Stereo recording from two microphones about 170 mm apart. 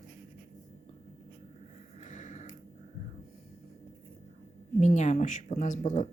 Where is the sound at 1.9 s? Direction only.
45° left (ahead or behind).